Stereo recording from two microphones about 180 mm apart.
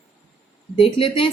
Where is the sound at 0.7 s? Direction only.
30° left (ahead or behind).